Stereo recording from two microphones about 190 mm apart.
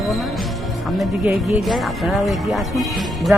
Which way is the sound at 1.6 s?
Centre (ahead or behind).